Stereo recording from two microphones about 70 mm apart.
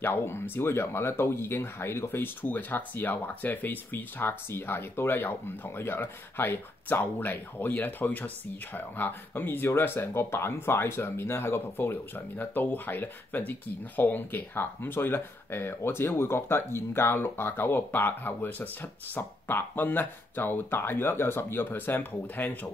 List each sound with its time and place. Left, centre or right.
0.0 s speech: left